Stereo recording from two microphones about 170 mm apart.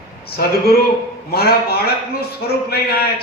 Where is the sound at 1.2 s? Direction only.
65° left (ahead or behind).